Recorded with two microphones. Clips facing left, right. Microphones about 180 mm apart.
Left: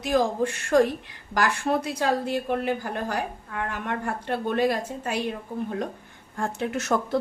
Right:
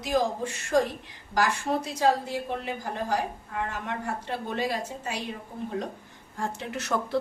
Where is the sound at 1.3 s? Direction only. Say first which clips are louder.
Left 2 dB; 65° left (ahead or behind).